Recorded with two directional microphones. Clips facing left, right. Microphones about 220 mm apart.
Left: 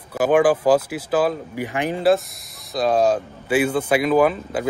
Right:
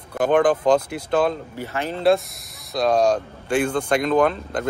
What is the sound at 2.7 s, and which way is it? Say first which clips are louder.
Speech: even; 5° left (ahead or behind).